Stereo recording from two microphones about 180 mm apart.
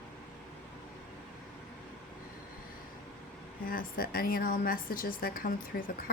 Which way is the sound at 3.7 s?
55° left (ahead or behind).